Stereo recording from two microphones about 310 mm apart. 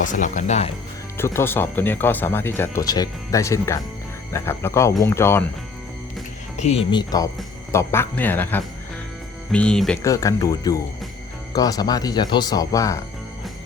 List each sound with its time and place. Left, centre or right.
0.0 s speech: left
1.1 s speech: centre
6.6 s speech: centre